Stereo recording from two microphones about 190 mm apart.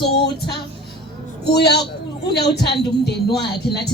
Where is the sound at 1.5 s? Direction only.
60° left (ahead or behind).